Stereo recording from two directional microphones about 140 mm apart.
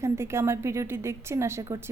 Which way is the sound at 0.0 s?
20° right (ahead or behind).